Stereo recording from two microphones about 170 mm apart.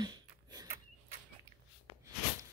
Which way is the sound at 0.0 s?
25° right (ahead or behind).